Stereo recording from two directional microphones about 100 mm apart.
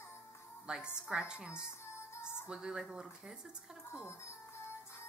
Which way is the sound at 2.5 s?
5° right (ahead or behind).